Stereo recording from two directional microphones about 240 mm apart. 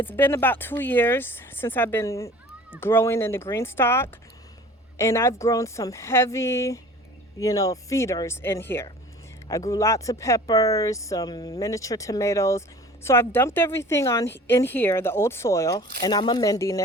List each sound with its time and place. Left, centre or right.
0.1 s speech: centre